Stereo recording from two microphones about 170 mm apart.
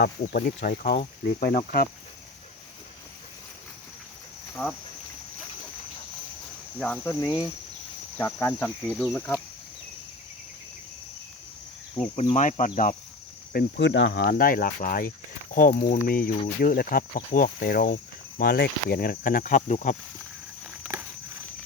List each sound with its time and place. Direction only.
0.0 s speech: 70° left (ahead or behind)
4.6 s insect: 10° left (ahead or behind)
6.7 s insect: 10° left (ahead or behind)
12.3 s speech: 45° left (ahead or behind)
13.5 s speech: 75° left (ahead or behind); by 20.0 s 45° left (ahead or behind)
20.7 s walk: 10° right (ahead or behind)